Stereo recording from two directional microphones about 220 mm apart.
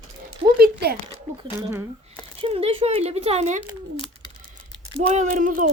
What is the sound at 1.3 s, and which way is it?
Speech, 15° right (ahead or behind).